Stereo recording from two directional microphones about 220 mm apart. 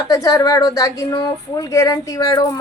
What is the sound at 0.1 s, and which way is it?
A woman's voice, 15° left (ahead or behind).